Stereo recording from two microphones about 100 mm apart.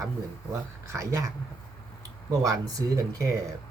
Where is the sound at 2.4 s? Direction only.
35° right (ahead or behind).